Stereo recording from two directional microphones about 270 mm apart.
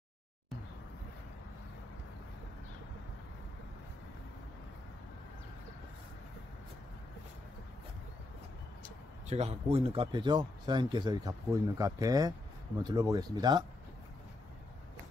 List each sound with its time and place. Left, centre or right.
8.8 s speech: right